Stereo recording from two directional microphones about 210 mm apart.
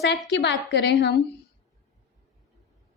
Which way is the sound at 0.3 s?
55° left (ahead or behind).